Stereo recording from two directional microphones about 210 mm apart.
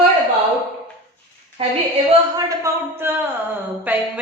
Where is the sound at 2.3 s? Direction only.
15° right (ahead or behind).